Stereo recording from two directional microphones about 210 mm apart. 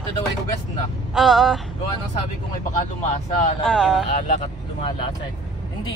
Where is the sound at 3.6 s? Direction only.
5° left (ahead or behind).